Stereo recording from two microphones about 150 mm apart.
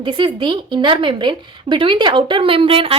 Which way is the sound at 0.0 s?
35° right (ahead or behind).